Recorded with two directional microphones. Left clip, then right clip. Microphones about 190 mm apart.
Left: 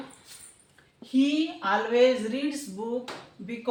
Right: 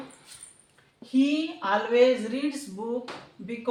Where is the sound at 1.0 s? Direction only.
15° right (ahead or behind).